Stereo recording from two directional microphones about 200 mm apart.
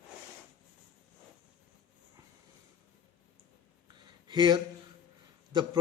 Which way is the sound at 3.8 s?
20° right (ahead or behind).